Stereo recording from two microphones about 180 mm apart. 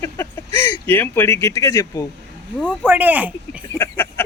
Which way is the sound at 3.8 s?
10° left (ahead or behind).